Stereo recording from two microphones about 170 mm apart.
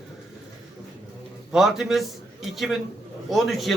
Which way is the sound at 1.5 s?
Centre (ahead or behind).